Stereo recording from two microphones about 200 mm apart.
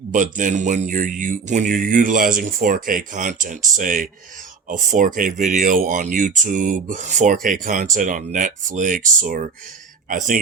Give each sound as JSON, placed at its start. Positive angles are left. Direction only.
{"t": 0.1, "sound": "speech", "side_deg": -40}